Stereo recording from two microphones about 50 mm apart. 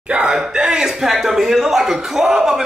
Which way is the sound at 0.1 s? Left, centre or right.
Right.